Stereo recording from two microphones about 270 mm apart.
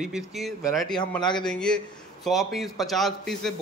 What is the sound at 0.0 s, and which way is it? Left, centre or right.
A man's voice, centre.